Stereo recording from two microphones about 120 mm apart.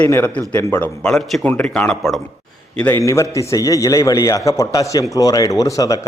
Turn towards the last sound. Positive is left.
turn(degrees=30)  # may be behind; listen again after turning